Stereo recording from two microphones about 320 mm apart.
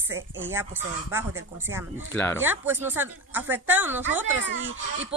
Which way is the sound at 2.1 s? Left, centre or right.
Centre.